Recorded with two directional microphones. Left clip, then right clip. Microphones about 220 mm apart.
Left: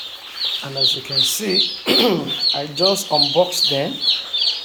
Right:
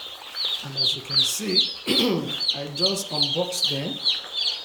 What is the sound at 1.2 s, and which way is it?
Speech, 5° right (ahead or behind).